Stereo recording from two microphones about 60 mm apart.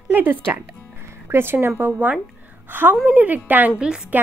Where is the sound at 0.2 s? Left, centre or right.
Right.